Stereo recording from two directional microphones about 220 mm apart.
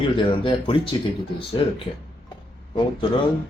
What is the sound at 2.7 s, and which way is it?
Speech, 20° left (ahead or behind).